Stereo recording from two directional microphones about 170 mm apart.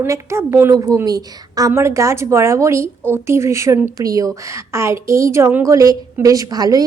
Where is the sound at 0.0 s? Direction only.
15° right (ahead or behind).